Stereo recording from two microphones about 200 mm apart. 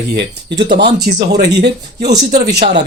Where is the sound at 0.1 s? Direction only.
60° right (ahead or behind).